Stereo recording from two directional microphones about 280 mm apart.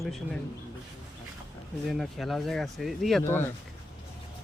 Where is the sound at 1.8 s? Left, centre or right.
Centre.